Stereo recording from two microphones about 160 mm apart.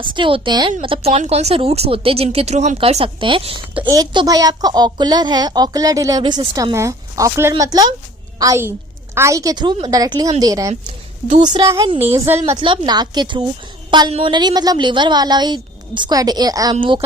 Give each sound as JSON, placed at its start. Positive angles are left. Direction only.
{"t": 0.0, "sound": "speech", "side_deg": -30}
{"t": 11.3, "sound": "a woman's voice", "side_deg": -45}
{"t": 11.5, "sound": "a woman's voice", "side_deg": -20}
{"t": 12.5, "sound": "speech", "side_deg": -30}